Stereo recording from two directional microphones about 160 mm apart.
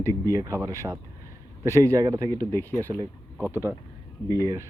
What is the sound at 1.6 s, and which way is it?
Speech, 15° left (ahead or behind).